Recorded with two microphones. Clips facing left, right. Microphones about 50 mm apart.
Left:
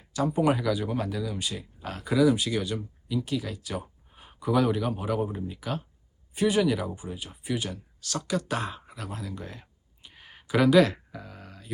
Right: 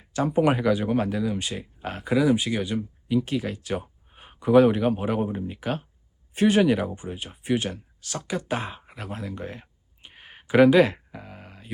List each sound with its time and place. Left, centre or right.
0.1 s speech: right
8.0 s speech: right